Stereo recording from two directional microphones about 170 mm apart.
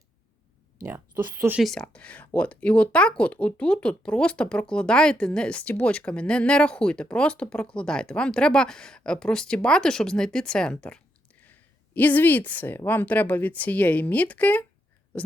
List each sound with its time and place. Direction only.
0.8 s speech: 15° right (ahead or behind)
1.5 s speech: centre (ahead or behind)